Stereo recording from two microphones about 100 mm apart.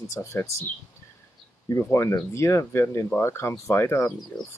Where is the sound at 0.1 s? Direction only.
30° left (ahead or behind).